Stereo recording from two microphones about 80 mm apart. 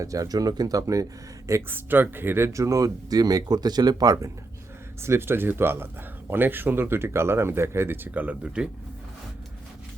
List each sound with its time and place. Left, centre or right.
0.0 s speech: right
1.5 s speech: right
5.0 s speech: right; by 8.7 s centre